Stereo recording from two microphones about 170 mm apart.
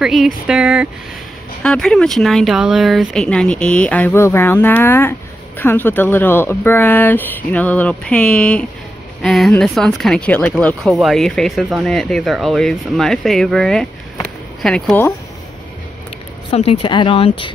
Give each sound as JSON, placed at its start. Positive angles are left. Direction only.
{"t": 0.0, "sound": "speech", "side_deg": 0}
{"t": 16.4, "sound": "speech", "side_deg": 35}